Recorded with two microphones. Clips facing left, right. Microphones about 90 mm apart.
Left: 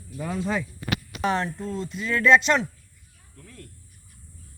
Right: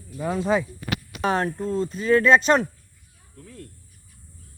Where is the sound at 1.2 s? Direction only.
40° right (ahead or behind).